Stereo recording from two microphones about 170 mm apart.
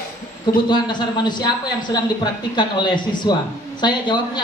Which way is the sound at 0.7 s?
25° left (ahead or behind).